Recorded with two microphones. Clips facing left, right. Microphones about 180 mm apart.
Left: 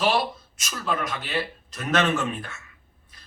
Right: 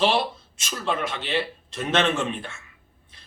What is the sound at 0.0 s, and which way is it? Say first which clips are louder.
Speech: right 1 dB; 25° right (ahead or behind).